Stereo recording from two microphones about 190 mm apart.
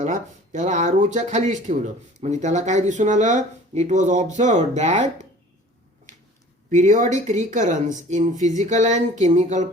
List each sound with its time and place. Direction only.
0.0 s speech: 40° right (ahead or behind)
6.7 s speech: 40° right (ahead or behind)